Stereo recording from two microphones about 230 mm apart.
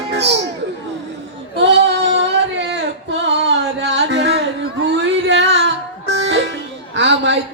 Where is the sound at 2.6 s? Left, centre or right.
Right.